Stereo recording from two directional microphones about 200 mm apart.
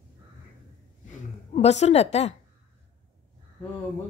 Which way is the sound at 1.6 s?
35° left (ahead or behind).